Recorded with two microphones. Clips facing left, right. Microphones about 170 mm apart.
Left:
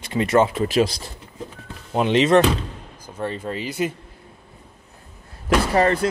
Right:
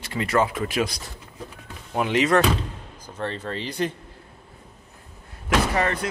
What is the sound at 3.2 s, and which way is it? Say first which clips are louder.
Speech: left 3 dB; 10° left (ahead or behind).